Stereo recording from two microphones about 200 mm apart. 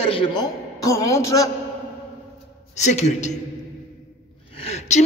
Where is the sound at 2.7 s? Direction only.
35° left (ahead or behind).